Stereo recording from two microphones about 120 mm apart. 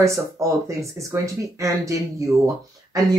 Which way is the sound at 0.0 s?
25° right (ahead or behind).